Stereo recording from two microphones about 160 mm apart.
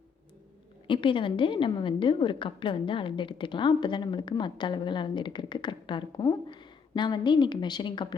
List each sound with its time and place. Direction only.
0.9 s a woman's voice: 30° left (ahead or behind)